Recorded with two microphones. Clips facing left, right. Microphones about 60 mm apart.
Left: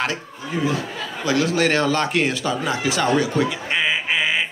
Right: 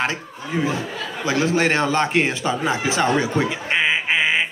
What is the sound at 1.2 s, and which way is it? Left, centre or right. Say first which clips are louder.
A man's voice: even; right.